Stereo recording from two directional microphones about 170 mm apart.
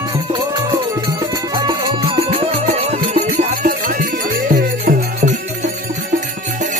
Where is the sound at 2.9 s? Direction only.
55° right (ahead or behind).